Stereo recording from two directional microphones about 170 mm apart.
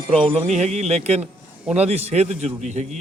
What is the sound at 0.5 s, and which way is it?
A man's voice, 40° right (ahead or behind).